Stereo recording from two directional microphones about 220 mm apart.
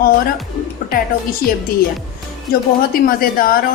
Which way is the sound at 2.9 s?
40° left (ahead or behind).